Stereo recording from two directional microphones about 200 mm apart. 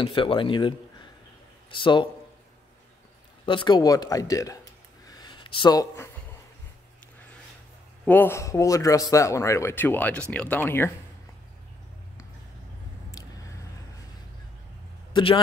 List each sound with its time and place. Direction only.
0.0 s speech: 25° left (ahead or behind)
3.4 s speech: 25° left (ahead or behind)
5.0 s a sound: 20° left (ahead or behind)
8.0 s a man's voice: 10° left (ahead or behind)
13.2 s squish: 20° left (ahead or behind)
15.1 s speech: 25° left (ahead or behind)